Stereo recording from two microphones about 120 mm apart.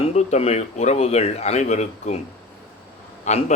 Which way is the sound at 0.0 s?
65° left (ahead or behind).